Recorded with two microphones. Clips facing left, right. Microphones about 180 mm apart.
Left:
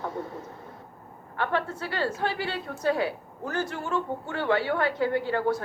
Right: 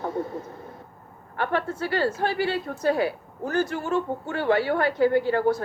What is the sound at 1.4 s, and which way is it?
A woman's voice, 35° right (ahead or behind).